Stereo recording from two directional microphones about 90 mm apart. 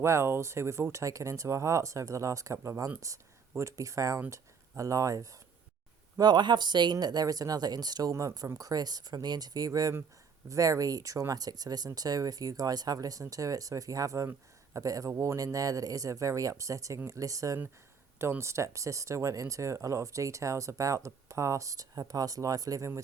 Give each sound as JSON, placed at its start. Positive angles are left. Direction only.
{"t": 0.0, "sound": "speech", "side_deg": -30}
{"t": 6.1, "sound": "speech", "side_deg": -50}
{"t": 8.1, "sound": "speech", "side_deg": -35}